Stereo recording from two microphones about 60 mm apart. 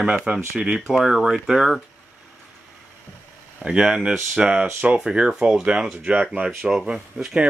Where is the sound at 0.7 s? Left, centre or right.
Centre.